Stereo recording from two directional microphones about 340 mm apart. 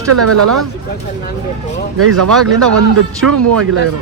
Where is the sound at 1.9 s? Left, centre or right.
Right.